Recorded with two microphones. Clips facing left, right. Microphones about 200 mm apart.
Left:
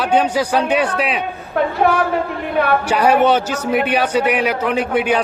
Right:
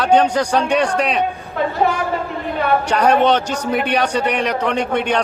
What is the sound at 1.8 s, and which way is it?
Speech, 60° left (ahead or behind).